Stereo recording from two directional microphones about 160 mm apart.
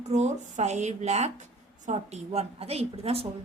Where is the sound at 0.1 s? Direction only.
45° right (ahead or behind).